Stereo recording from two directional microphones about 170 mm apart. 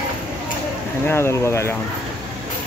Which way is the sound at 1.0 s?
15° left (ahead or behind).